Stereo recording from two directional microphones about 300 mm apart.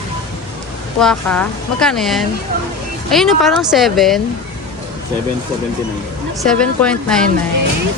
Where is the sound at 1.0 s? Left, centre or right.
Centre.